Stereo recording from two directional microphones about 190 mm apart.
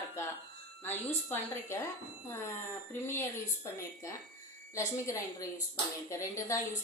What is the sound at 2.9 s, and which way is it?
Speech, 10° left (ahead or behind).